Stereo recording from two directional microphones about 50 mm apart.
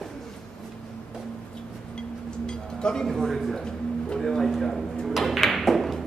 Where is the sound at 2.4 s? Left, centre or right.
Centre.